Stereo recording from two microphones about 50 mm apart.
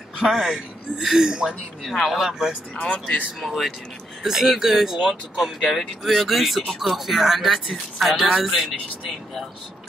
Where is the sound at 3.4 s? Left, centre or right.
Centre.